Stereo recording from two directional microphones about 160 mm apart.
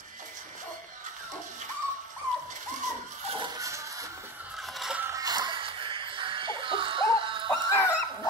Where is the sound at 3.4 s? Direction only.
20° right (ahead or behind).